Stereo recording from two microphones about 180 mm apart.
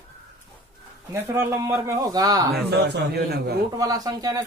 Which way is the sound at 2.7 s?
65° right (ahead or behind).